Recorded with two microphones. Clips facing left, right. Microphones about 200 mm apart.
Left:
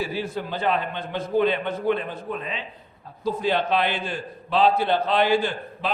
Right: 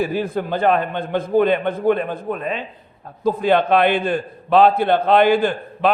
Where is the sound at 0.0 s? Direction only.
55° right (ahead or behind).